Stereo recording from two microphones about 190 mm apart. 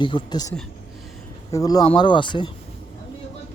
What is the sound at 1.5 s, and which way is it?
Speech, 20° left (ahead or behind).